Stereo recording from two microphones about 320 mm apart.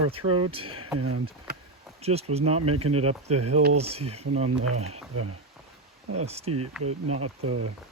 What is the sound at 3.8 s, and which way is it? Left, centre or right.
Speech, centre.